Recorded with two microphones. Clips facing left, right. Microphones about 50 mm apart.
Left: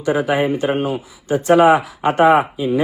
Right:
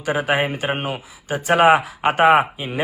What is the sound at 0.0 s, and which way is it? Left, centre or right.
A man's voice, right.